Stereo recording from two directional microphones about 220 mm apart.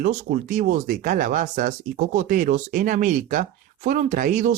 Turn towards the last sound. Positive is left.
turn(degrees=-35)  # may be behind; listen again after turning